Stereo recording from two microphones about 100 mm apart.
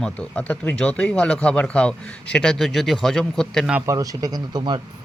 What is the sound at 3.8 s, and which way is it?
Speech, 35° right (ahead or behind).